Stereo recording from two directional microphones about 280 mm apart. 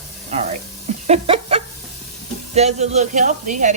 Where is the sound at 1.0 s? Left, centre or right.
Right.